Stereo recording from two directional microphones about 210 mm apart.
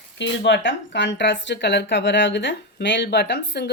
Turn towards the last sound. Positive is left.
turn(degrees=55)  # may be behind; listen again after turning